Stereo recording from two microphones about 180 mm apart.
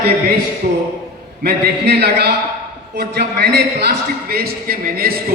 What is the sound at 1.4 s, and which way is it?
A man's voice, 65° right (ahead or behind).